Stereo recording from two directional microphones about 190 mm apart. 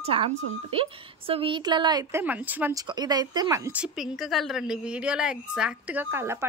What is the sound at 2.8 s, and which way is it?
A woman's voice, 20° right (ahead or behind).